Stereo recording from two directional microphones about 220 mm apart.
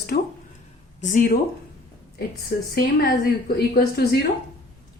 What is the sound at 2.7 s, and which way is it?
A woman's voice, 45° left (ahead or behind).